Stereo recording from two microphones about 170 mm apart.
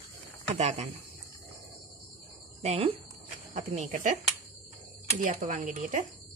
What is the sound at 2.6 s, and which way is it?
Speech, 35° right (ahead or behind).